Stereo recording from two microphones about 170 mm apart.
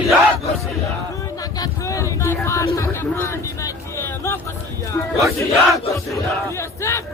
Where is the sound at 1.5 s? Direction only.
20° left (ahead or behind).